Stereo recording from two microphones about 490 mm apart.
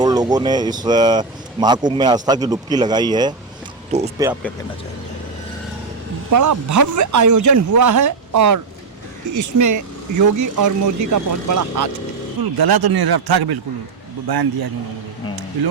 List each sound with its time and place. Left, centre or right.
0.0 s speech: centre
6.3 s speech: right
12.4 s speech: right